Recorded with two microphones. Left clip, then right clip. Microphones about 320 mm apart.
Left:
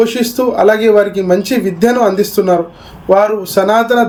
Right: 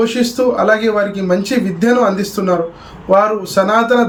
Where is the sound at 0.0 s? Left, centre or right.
Centre.